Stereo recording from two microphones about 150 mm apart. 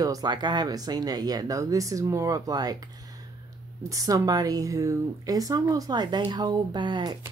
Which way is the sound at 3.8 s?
20° right (ahead or behind).